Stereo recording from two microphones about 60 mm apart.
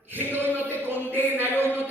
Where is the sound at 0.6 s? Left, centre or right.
Right.